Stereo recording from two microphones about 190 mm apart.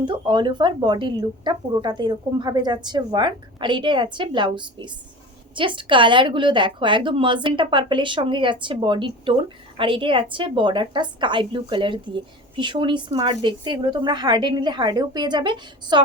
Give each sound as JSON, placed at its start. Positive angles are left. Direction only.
{"t": 0.0, "sound": "a woman's voice", "side_deg": -25}